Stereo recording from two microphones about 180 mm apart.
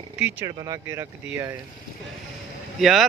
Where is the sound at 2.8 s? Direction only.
Centre (ahead or behind).